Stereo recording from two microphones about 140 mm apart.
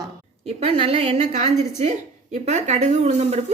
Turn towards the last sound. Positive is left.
turn(degrees=-50)  # may be behind; listen again after turning